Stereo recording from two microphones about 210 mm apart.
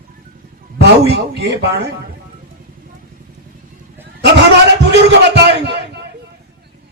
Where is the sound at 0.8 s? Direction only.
55° right (ahead or behind).